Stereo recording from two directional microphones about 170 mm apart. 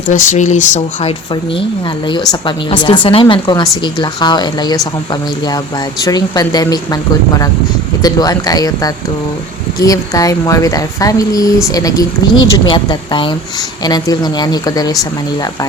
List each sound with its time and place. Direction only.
0.1 s speech: 50° left (ahead or behind)
2.0 s speech: 30° left (ahead or behind)
6.0 s speech: 20° left (ahead or behind)